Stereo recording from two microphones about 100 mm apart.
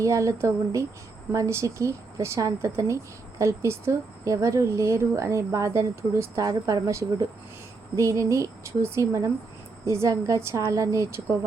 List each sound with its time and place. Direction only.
0.0 s a woman's voice: 30° right (ahead or behind)